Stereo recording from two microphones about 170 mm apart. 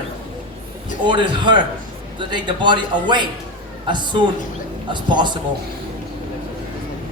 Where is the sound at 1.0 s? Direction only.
25° right (ahead or behind).